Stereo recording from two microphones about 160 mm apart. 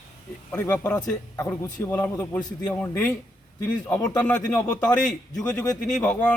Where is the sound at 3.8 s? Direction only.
25° left (ahead or behind).